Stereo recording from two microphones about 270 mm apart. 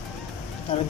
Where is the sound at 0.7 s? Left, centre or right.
Centre.